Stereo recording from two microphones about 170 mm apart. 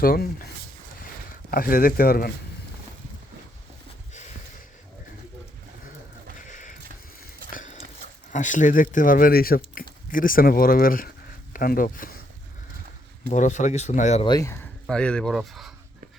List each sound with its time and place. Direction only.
0.0 s speech: 60° left (ahead or behind)
6.5 s a sound: 50° left (ahead or behind)
7.5 s horse: 45° left (ahead or behind)
8.3 s speech: 45° left (ahead or behind)
13.3 s speech: 45° left (ahead or behind)
14.3 s speech: 20° left (ahead or behind)
14.8 s speech: 5° left (ahead or behind)